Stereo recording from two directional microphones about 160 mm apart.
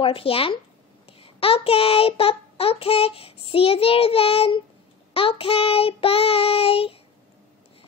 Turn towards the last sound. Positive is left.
turn(degrees=35)  # may be behind; listen again after turning